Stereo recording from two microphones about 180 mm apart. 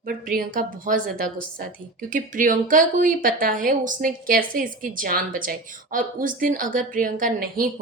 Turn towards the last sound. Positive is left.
turn(degrees=-50)  # may be behind; listen again after turning